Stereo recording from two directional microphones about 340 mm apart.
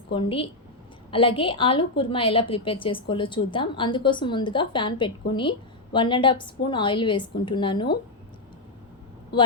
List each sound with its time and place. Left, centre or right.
0.1 s a woman's voice: centre